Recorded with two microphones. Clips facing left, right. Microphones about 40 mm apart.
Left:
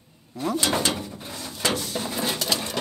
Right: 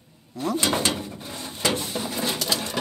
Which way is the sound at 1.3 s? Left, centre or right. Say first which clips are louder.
Right 1 dB; right.